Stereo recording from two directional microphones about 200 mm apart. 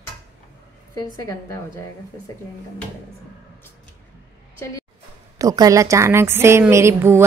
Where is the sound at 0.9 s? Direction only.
15° left (ahead or behind).